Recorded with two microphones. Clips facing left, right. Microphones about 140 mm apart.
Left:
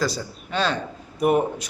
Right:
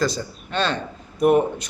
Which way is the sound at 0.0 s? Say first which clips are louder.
Right 2 dB; 10° left (ahead or behind).